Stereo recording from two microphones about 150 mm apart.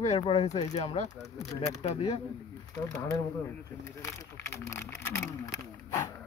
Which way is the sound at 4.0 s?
20° left (ahead or behind).